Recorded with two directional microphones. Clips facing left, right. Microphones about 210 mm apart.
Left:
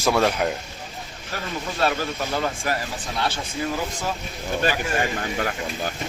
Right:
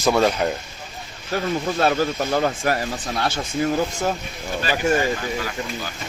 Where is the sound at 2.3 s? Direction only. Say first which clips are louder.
Right 5 dB; 45° right (ahead or behind).